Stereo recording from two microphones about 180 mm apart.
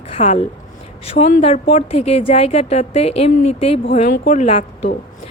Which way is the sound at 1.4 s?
35° left (ahead or behind).